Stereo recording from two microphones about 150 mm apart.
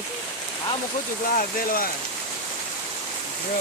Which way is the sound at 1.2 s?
70° left (ahead or behind).